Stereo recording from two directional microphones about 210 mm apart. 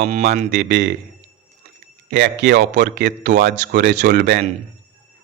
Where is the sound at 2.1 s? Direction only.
55° right (ahead or behind).